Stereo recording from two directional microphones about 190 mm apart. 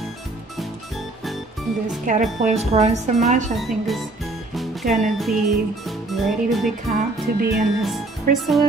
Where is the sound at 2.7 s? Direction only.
35° right (ahead or behind).